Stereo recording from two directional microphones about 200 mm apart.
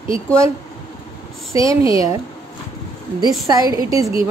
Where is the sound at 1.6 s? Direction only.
15° right (ahead or behind).